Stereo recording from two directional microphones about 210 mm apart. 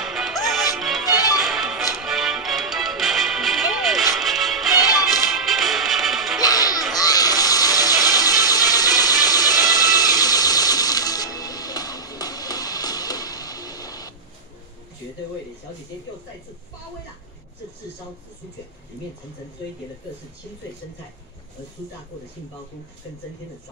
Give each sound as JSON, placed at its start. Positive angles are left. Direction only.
{"t": 0.0, "sound": "music", "side_deg": 0}
{"t": 6.4, "sound": "music", "side_deg": 15}
{"t": 7.0, "sound": "a sound", "side_deg": 15}